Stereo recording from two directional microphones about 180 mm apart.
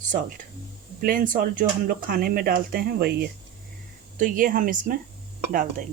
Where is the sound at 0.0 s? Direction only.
45° right (ahead or behind).